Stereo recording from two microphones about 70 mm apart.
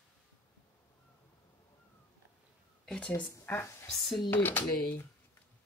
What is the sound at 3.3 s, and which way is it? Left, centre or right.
Speech, left.